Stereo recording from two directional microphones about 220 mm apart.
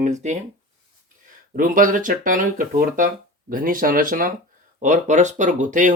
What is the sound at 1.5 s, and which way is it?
Speech, 40° right (ahead or behind).